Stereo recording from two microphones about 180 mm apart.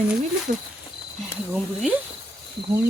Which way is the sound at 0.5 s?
40° right (ahead or behind).